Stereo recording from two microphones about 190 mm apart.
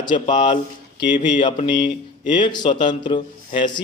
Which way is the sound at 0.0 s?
25° left (ahead or behind).